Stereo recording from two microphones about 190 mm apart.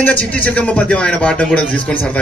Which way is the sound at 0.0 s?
10° left (ahead or behind).